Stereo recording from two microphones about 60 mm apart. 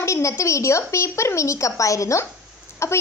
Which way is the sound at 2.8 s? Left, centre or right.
Left.